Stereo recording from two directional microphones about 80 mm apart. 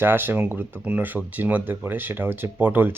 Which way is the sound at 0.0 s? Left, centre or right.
Right.